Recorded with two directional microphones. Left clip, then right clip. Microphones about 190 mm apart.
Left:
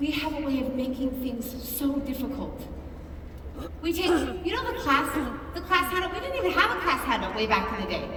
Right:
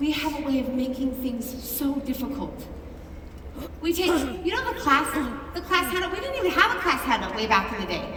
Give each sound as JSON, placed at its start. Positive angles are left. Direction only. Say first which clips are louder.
{"t": 0.0, "sound": "a woman's voice", "louder": "right 2 dB", "side_deg": -15}
{"t": 3.6, "sound": "a woman's voice", "louder": "right 3 dB", "side_deg": -15}